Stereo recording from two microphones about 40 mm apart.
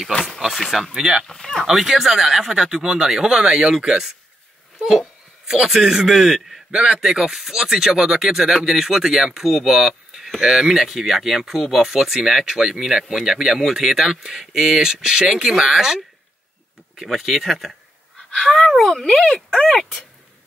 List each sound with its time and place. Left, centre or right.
0.6 s speech: centre
0.9 s speech: centre
1.2 s speech: centre
1.7 s speech: centre
5.7 s speech: centre
6.7 s speech: centre
17.0 s speech: centre
18.3 s speech: centre
19.1 s speech: left
19.5 s speech: centre